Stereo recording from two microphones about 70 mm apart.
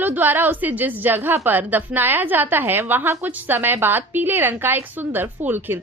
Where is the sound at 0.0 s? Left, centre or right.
Right.